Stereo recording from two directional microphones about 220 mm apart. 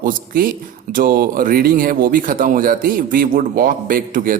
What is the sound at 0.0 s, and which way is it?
Speech, 40° right (ahead or behind).